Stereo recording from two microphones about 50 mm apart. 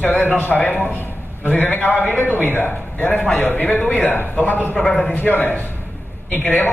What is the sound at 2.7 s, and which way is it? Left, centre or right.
A man's voice, left.